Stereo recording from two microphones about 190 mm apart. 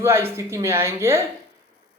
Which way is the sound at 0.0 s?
15° right (ahead or behind).